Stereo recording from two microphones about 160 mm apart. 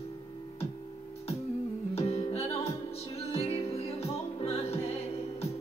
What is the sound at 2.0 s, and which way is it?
Music, 40° left (ahead or behind).